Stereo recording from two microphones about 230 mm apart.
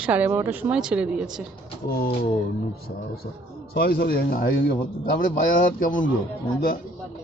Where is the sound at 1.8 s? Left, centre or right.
Left.